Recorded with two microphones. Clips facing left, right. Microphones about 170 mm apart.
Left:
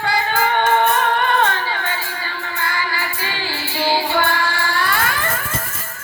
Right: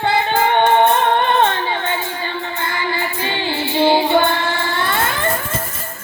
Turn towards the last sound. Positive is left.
turn(degrees=-25)  # may be behind; listen again after turning